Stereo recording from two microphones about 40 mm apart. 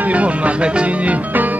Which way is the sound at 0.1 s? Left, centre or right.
Right.